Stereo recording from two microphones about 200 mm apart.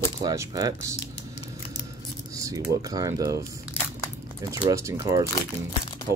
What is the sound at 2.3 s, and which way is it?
Speech, 15° right (ahead or behind).